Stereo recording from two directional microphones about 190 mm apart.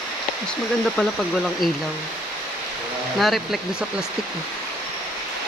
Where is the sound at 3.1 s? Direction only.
Centre (ahead or behind).